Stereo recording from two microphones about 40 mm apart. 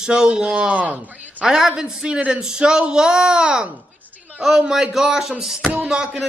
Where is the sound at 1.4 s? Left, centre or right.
Centre.